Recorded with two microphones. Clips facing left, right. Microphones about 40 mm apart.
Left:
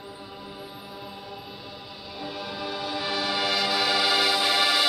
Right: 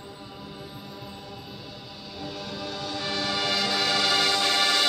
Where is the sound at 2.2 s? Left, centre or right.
Centre.